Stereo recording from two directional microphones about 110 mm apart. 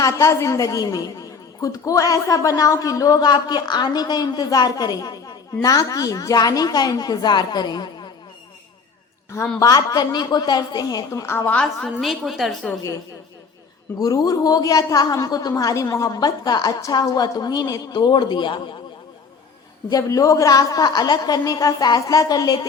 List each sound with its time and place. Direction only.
0.0 s a woman's voice: 25° left (ahead or behind)
9.3 s a woman's voice: 25° left (ahead or behind)
11.5 s a woman's voice: 5° left (ahead or behind)
14.0 s a woman's voice: 35° left (ahead or behind)
19.9 s a woman's voice: 30° left (ahead or behind)